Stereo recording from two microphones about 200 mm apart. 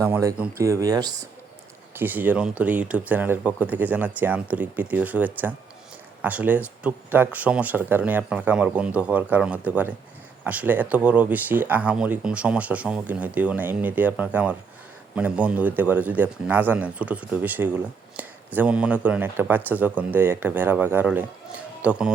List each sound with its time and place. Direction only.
0.0 s speech: 15° right (ahead or behind)